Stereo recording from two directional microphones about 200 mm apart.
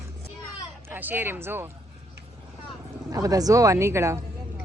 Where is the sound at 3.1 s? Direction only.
15° right (ahead or behind).